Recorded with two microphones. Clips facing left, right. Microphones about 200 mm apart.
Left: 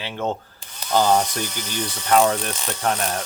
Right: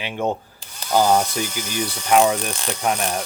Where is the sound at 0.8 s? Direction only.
10° right (ahead or behind).